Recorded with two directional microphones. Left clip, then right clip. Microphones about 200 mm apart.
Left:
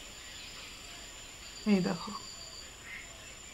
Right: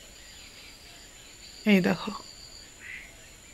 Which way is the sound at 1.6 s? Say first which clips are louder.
Right 8 dB; 25° right (ahead or behind).